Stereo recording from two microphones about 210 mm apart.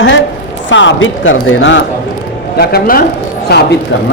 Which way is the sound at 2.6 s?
50° left (ahead or behind).